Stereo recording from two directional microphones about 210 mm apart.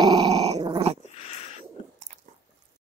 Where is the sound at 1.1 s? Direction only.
30° left (ahead or behind).